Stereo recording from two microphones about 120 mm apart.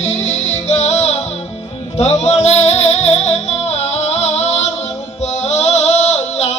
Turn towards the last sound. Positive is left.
turn(degrees=65)  # may be behind; listen again after turning